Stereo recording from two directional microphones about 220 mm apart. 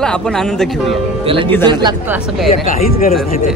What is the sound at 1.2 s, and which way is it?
Speech, 25° right (ahead or behind).